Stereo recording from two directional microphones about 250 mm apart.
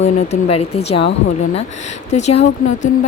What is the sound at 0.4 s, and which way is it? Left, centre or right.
Speech, left.